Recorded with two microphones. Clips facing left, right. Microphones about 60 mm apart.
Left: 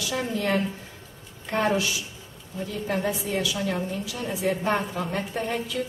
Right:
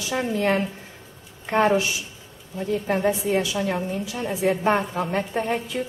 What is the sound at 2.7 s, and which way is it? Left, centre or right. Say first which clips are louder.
A woman's voice: right 5 dB; right.